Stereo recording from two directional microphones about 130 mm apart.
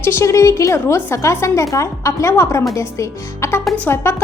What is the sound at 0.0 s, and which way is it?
A woman's voice, 20° left (ahead or behind).